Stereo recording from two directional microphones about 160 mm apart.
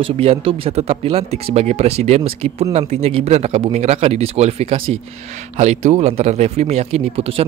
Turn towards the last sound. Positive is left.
turn(degrees=-35)  # may be behind; listen again after turning